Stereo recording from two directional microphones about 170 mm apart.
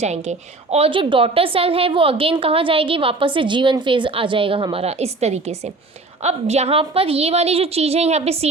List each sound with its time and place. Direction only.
0.0 s a woman's voice: 40° right (ahead or behind)